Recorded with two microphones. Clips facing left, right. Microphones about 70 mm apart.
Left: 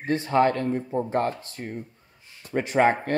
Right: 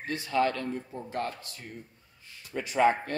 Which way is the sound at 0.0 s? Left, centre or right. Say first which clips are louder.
Left 6 dB; left.